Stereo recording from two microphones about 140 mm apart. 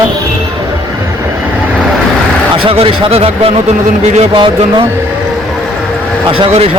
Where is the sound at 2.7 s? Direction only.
40° right (ahead or behind).